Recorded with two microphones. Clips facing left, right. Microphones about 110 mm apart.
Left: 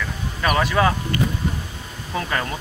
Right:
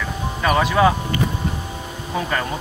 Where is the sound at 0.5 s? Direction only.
10° right (ahead or behind).